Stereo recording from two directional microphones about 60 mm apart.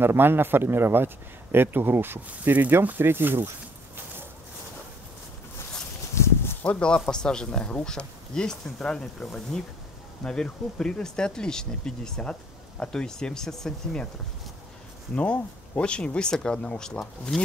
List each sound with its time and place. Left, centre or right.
0.0 s speech: right
2.2 s speech: right
6.2 s a sound: left
6.6 s speech: centre
15.1 s speech: left